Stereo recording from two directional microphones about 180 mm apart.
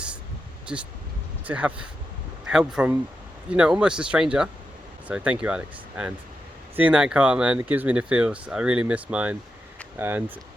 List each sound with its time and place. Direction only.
0.7 s speech: 5° right (ahead or behind)